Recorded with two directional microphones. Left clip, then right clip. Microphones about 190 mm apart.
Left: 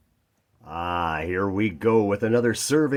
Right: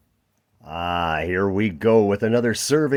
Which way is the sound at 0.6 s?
45° right (ahead or behind).